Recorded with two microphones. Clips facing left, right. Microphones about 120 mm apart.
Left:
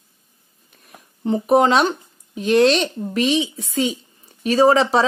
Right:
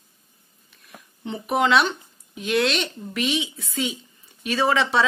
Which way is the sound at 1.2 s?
40° left (ahead or behind).